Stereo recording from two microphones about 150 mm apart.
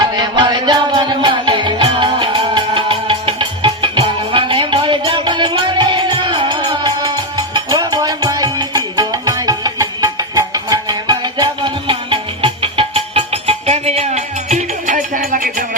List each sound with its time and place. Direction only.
0.0 s music: 30° right (ahead or behind); by 15.6 s 70° right (ahead or behind)